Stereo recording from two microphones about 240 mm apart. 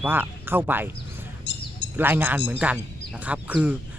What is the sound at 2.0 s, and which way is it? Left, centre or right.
Speech, centre.